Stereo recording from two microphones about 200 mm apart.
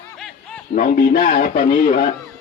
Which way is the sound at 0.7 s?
40° left (ahead or behind).